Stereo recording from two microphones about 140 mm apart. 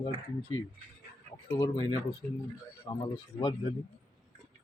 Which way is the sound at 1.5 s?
25° left (ahead or behind).